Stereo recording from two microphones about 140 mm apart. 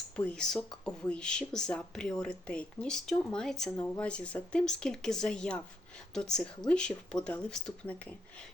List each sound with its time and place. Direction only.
0.2 s speech: 10° left (ahead or behind)